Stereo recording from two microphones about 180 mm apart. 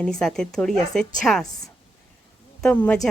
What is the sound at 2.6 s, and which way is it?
Speech, 5° left (ahead or behind).